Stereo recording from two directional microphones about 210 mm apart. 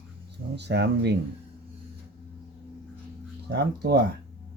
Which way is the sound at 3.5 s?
50° right (ahead or behind).